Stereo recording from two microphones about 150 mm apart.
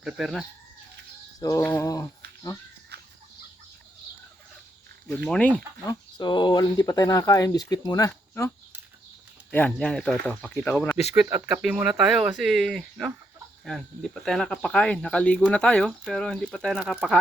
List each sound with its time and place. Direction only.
0.0 s speech: centre (ahead or behind)
1.4 s speech: 20° left (ahead or behind)
2.9 s chicken: 90° right
5.0 s speech: 10° left (ahead or behind)
5.8 s speech: 25° left (ahead or behind); by 10.5 s 5° left (ahead or behind)
11.1 s speech: 10° right (ahead or behind)